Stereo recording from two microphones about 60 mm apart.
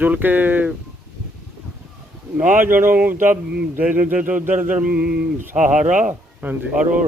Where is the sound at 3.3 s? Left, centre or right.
Centre.